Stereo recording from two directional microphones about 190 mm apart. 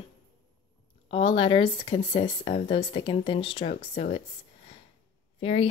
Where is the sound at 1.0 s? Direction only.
30° left (ahead or behind).